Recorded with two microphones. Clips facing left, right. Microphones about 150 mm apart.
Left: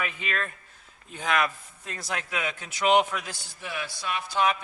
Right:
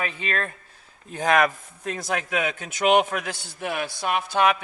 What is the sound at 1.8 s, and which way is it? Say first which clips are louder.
Speech: right 7 dB; 60° right (ahead or behind).